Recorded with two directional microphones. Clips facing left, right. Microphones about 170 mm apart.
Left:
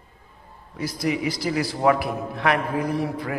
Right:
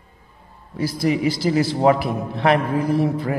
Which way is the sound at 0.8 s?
30° right (ahead or behind).